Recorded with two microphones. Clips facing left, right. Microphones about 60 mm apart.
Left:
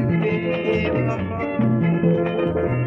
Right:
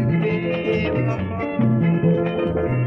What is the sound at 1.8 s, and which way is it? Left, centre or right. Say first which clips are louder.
Music: even; centre.